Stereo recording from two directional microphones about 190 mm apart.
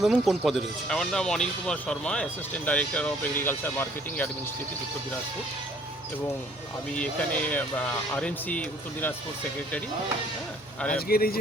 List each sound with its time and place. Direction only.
0.0 s speech: centre (ahead or behind)
6.9 s speech: 5° left (ahead or behind)
10.9 s speech: 50° left (ahead or behind)